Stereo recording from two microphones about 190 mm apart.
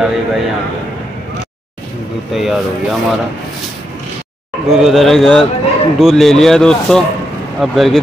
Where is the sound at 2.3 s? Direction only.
Centre (ahead or behind).